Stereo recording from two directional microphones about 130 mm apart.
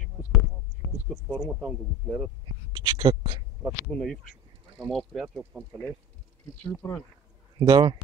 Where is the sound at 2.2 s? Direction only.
40° right (ahead or behind).